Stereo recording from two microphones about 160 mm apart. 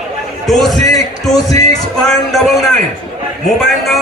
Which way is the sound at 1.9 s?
5° left (ahead or behind).